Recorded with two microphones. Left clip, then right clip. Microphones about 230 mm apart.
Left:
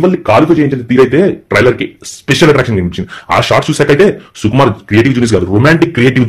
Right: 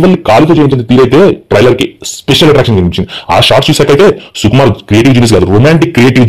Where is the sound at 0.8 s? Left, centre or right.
Right.